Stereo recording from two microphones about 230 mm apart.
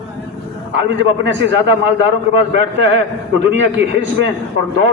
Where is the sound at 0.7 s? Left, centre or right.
Right.